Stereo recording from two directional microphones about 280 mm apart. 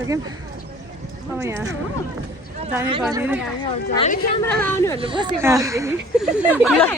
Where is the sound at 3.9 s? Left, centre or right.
Left.